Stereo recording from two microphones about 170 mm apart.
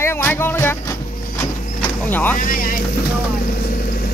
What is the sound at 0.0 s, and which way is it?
Music, 15° left (ahead or behind).